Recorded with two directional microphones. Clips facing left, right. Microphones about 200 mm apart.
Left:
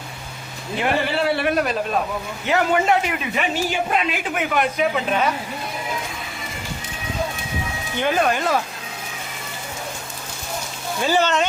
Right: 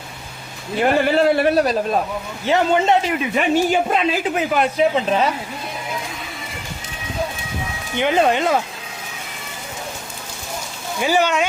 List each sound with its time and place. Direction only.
0.8 s a man's voice: 40° right (ahead or behind); by 3.1 s 25° right (ahead or behind)
3.3 s speech: 45° right (ahead or behind)
4.4 s a man's voice: 30° right (ahead or behind)
7.9 s a man's voice: 20° right (ahead or behind)
11.0 s speech: 10° right (ahead or behind)